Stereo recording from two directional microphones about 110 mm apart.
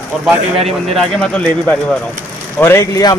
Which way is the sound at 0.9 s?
10° left (ahead or behind).